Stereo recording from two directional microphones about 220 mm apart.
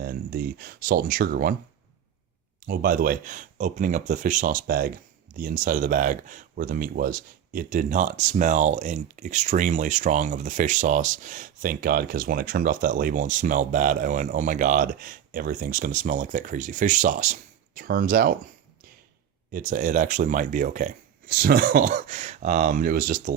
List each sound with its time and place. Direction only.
0.0 s speech: 45° right (ahead or behind)
2.6 s speech: 40° right (ahead or behind)
19.5 s speech: 35° right (ahead or behind)